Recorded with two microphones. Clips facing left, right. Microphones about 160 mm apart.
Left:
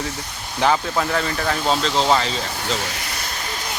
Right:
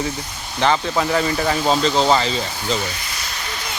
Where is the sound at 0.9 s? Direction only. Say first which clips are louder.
Right 3 dB; 5° right (ahead or behind).